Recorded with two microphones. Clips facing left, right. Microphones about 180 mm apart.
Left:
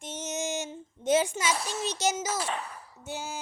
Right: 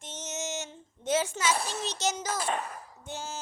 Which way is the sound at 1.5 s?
55° right (ahead or behind).